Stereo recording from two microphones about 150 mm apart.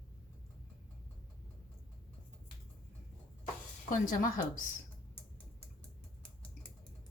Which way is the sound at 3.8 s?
60° left (ahead or behind).